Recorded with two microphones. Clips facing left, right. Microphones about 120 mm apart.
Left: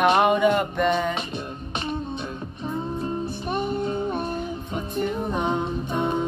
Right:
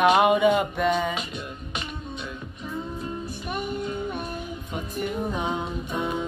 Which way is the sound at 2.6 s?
30° left (ahead or behind).